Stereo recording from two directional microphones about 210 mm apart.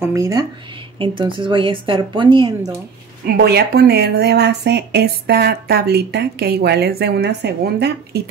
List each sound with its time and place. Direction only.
0.0 s a woman's voice: 15° right (ahead or behind)
3.3 s speech: 50° right (ahead or behind)